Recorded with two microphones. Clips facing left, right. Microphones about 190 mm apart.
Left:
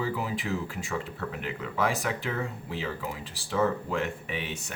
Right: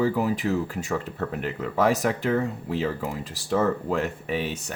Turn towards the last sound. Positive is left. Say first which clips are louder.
# right 7 dB
turn(degrees=-40)  # may be behind; listen again after turning